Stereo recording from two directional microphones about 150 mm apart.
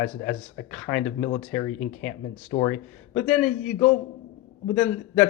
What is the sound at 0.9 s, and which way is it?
A man's voice, 5° left (ahead or behind).